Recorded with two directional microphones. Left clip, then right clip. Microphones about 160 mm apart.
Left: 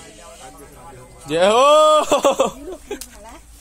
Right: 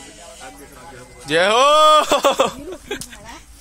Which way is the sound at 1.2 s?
5° left (ahead or behind).